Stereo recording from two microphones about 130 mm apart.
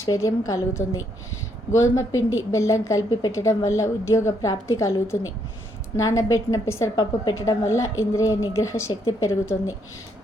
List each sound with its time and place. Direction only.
0.0 s a woman's voice: 25° left (ahead or behind)